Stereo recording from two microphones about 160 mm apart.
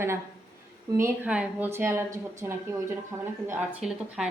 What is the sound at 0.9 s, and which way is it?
Speech, 15° right (ahead or behind).